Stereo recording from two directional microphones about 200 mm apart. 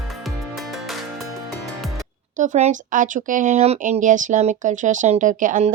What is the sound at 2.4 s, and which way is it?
A woman's voice, 35° right (ahead or behind).